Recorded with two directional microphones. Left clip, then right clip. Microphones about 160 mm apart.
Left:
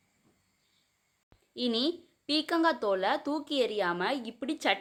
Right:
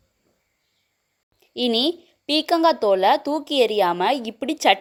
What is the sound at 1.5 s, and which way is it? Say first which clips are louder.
A woman's voice: right 10 dB; 40° right (ahead or behind).